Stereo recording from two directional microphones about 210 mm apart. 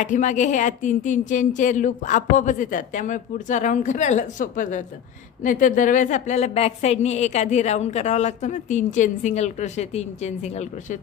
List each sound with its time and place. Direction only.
0.0 s a woman's voice: 35° left (ahead or behind)